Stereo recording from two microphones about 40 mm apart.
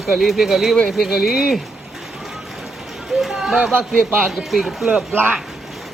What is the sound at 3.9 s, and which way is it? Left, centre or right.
Speech, centre.